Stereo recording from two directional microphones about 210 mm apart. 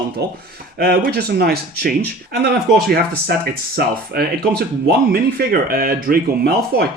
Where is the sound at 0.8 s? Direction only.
45° right (ahead or behind).